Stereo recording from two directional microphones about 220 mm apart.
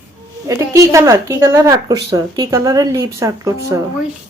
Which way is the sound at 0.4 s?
15° right (ahead or behind).